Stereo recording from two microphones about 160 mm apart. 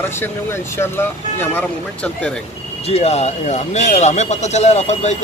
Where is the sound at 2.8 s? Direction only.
40° left (ahead or behind).